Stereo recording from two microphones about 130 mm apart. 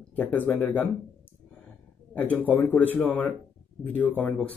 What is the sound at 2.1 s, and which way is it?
Speech, 10° left (ahead or behind).